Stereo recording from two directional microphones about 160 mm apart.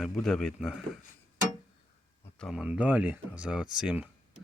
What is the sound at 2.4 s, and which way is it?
Speech, centre (ahead or behind).